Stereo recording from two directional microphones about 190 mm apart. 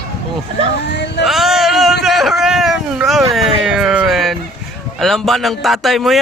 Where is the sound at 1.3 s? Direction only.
Centre (ahead or behind).